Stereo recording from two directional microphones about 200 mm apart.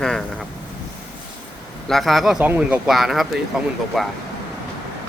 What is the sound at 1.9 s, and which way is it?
Speech, centre (ahead or behind).